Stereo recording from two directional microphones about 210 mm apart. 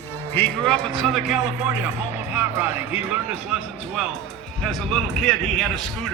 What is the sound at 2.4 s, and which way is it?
A man's voice, 10° right (ahead or behind).